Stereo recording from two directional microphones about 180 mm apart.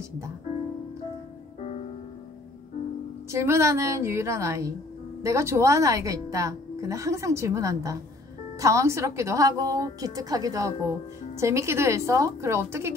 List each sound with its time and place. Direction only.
3.3 s speech: 15° right (ahead or behind)